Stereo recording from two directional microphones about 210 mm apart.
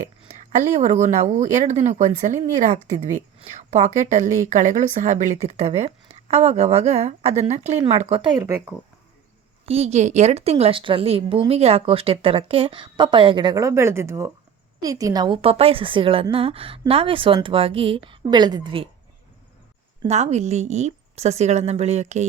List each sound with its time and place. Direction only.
0.5 s speech: 35° right (ahead or behind); by 8.5 s 20° right (ahead or behind)
9.6 s a woman's voice: 30° right (ahead or behind)
20.0 s speech: 30° right (ahead or behind)